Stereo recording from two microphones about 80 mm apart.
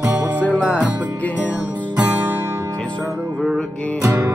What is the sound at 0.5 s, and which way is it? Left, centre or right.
Music, centre.